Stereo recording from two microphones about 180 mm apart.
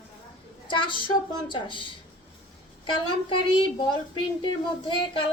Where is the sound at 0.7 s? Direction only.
25° left (ahead or behind).